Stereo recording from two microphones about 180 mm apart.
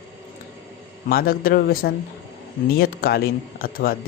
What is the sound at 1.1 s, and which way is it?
Speech, 55° left (ahead or behind).